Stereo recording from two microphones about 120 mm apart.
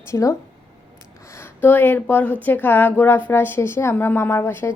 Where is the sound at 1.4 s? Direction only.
15° left (ahead or behind).